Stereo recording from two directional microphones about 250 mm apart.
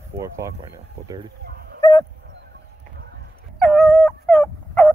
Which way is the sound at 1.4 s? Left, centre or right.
Right.